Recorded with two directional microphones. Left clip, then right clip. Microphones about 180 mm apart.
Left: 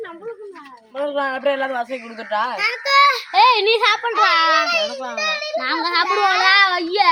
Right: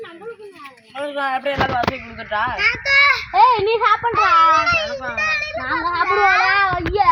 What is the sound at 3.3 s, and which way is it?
Speech, 5° right (ahead or behind).